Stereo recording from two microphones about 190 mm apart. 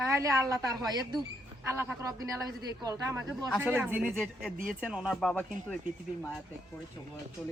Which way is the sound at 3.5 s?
10° right (ahead or behind).